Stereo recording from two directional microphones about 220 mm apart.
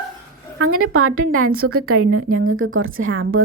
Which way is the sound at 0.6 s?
80° right.